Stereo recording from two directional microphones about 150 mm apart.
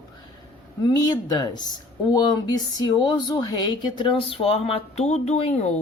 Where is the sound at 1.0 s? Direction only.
25° left (ahead or behind); by 5.8 s 45° left (ahead or behind).